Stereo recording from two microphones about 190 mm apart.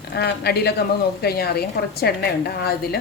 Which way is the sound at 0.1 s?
55° left (ahead or behind).